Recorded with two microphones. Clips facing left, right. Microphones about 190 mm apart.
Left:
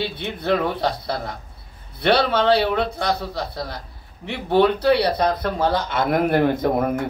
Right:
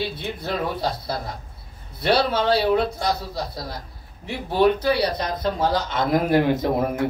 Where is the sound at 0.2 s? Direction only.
65° left (ahead or behind).